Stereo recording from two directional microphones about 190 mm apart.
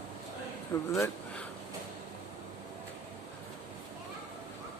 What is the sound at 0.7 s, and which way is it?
Speech, 15° left (ahead or behind).